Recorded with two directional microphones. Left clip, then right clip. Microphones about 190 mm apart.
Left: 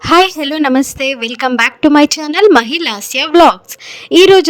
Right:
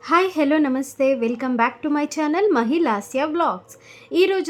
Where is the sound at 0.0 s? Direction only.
45° left (ahead or behind).